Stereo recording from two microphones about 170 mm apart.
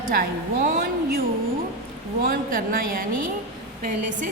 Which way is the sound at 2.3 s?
55° right (ahead or behind).